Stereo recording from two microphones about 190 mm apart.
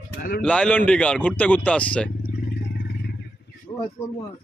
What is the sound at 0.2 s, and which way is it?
Speech, 50° left (ahead or behind).